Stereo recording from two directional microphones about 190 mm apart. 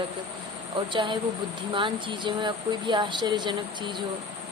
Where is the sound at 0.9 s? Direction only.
25° right (ahead or behind).